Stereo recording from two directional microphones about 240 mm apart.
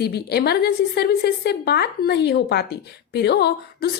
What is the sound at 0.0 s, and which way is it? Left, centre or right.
A woman's voice, left.